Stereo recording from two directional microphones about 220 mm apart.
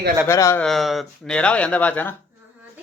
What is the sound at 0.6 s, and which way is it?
Speech, centre (ahead or behind).